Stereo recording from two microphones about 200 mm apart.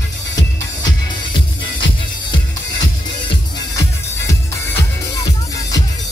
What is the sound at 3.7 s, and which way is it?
Music, 15° left (ahead or behind).